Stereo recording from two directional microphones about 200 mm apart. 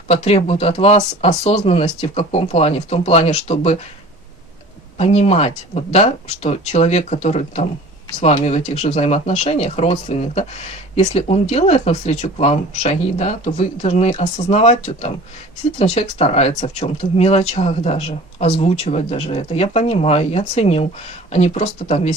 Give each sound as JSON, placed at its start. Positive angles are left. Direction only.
{"t": 0.1, "sound": "speech", "side_deg": 30}
{"t": 4.9, "sound": "speech", "side_deg": 30}